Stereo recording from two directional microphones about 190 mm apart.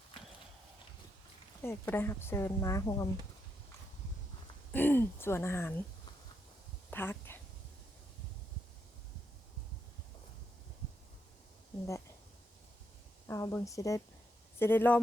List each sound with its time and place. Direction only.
1.6 s speech: 10° left (ahead or behind)
4.7 s speech: 10° left (ahead or behind)
6.9 s a sound: 10° left (ahead or behind)
13.2 s speech: 15° left (ahead or behind)